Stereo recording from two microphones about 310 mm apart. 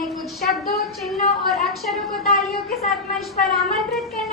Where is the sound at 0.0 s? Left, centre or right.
Centre.